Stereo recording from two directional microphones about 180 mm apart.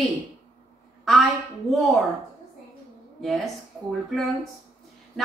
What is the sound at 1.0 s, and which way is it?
Speech, centre (ahead or behind).